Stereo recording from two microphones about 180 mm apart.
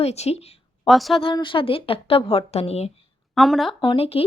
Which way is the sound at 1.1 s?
30° left (ahead or behind).